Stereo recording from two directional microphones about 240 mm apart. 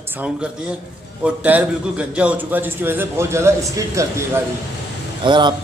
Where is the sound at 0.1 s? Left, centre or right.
Centre.